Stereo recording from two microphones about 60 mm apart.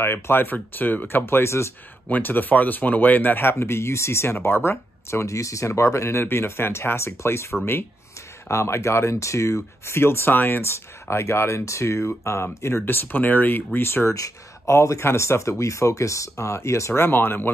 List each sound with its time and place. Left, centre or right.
0.0 s speech: left
2.0 s speech: left
7.5 s speech: centre
8.5 s speech: left
12.6 s speech: left
14.0 s speech: left